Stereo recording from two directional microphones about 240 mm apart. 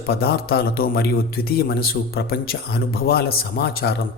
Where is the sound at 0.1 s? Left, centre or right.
Left.